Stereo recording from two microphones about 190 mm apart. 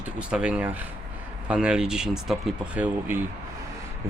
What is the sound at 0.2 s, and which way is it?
Speech, 5° right (ahead or behind).